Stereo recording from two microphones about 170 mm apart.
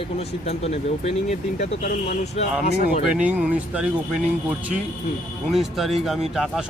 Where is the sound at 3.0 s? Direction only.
5° right (ahead or behind).